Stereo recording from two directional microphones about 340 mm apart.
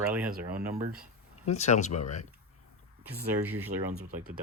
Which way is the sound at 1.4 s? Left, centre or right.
Centre.